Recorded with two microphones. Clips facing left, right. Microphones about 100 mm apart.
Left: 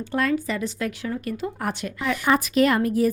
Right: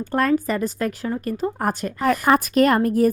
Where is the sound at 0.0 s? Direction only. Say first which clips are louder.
Right 4 dB; 45° right (ahead or behind).